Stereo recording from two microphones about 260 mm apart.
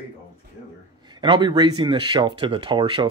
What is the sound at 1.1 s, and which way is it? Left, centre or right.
Speech, centre.